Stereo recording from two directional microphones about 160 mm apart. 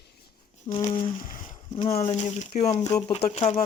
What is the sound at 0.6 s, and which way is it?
Speech, 40° left (ahead or behind).